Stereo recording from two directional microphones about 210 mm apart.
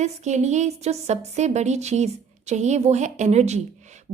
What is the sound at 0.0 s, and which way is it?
A woman's voice, 35° right (ahead or behind).